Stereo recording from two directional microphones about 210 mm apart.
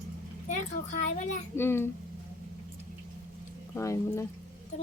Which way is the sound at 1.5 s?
10° left (ahead or behind).